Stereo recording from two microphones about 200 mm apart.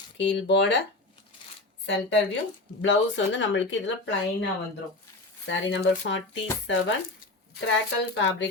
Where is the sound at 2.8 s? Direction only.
70° left (ahead or behind).